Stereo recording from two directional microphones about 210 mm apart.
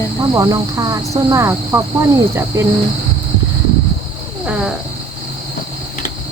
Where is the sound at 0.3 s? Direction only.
20° right (ahead or behind).